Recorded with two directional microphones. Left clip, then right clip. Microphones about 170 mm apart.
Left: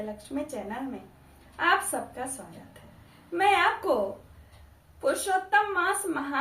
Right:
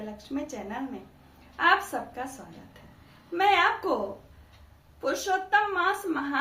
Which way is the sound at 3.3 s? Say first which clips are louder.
Even; 15° right (ahead or behind).